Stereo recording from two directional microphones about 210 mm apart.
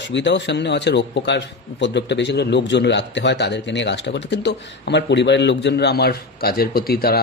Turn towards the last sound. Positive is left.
turn(degrees=45)  # may be behind; listen again after turning